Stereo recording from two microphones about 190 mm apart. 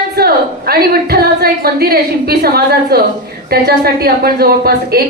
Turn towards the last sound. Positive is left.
turn(degrees=-55)  # may be behind; listen again after turning